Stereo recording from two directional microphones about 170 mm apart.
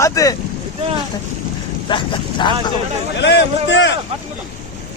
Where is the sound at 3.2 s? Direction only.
90° left.